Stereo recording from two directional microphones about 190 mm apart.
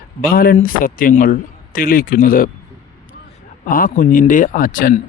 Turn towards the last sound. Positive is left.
turn(degrees=45)  # may be behind; listen again after turning